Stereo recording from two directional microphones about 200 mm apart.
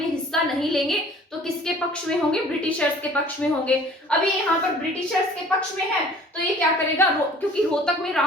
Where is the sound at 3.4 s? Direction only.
5° left (ahead or behind).